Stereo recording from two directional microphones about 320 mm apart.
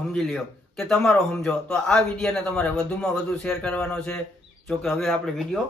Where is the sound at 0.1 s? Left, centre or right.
Centre.